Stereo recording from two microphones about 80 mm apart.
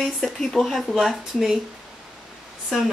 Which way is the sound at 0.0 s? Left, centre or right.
Centre.